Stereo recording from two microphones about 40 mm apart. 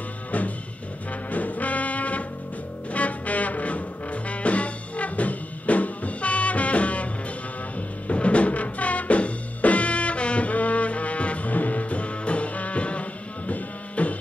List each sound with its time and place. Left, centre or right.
1.3 s music: left
8.1 s music: left